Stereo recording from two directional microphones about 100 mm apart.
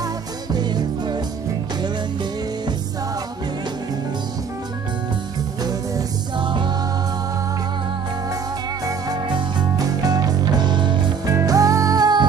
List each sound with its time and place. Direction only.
0.5 s music: 45° right (ahead or behind)
5.6 s music: 40° right (ahead or behind)
9.3 s music: 45° right (ahead or behind)
11.2 s music: 35° right (ahead or behind)